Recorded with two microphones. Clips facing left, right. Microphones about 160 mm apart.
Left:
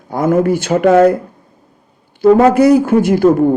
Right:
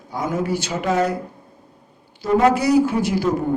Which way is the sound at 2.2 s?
55° left (ahead or behind).